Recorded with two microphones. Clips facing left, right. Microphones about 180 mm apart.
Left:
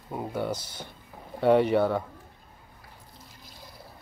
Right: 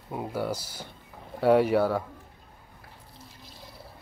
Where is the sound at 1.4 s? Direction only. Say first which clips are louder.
Even; 5° right (ahead or behind).